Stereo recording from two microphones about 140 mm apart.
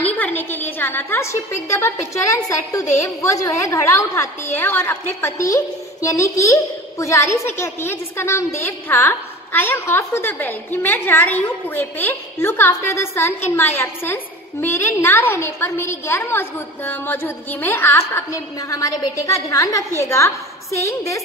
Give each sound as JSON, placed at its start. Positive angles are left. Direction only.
{"t": 0.0, "sound": "a woman's voice", "side_deg": 10}